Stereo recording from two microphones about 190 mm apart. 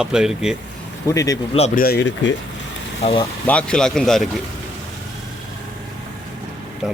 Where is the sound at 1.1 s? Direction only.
20° left (ahead or behind).